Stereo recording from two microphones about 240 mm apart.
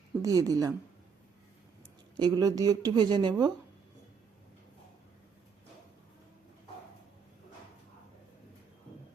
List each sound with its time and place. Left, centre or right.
0.2 s speech: centre
2.1 s speech: centre